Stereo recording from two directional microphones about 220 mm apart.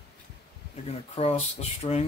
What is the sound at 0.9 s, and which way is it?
Speech, 25° left (ahead or behind).